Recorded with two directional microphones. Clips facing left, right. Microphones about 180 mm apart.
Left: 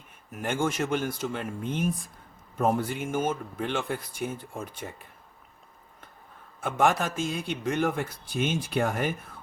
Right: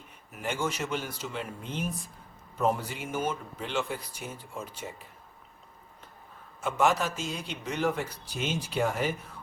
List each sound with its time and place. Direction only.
0.3 s a man's voice: 50° left (ahead or behind)
6.6 s a man's voice: 55° left (ahead or behind)